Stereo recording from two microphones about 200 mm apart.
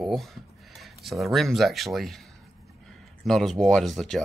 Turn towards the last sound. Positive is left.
turn(degrees=0)  # may be behind; listen again after turning